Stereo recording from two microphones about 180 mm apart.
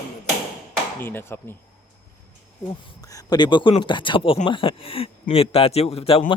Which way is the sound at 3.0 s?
20° left (ahead or behind).